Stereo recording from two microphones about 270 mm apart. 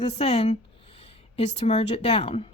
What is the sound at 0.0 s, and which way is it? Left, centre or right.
Speech, left.